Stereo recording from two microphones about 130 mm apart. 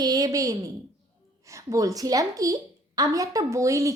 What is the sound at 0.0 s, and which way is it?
A woman's voice, 30° right (ahead or behind).